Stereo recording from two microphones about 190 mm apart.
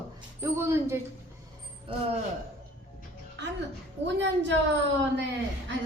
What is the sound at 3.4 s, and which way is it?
A woman's voice, 65° right (ahead or behind).